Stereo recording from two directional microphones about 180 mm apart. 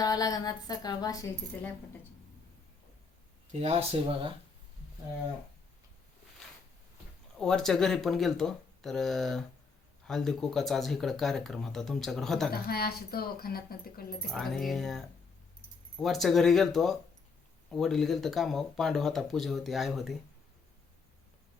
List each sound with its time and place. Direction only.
0.0 s speech: 20° left (ahead or behind)
3.6 s speech: 35° right (ahead or behind)
7.3 s speech: 5° left (ahead or behind)
12.5 s speech: 60° left (ahead or behind)
14.3 s speech: centre (ahead or behind)